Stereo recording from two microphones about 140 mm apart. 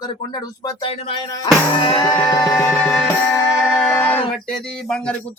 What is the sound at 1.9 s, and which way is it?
Speech, 10° left (ahead or behind).